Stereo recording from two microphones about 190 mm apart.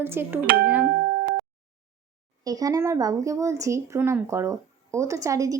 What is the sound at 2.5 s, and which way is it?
Speech, 20° right (ahead or behind).